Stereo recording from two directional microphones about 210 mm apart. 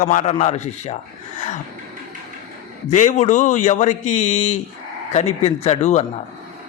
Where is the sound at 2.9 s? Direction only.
35° left (ahead or behind).